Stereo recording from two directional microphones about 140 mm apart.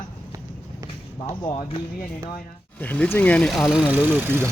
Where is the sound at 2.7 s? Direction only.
10° left (ahead or behind); by 4.4 s 15° right (ahead or behind).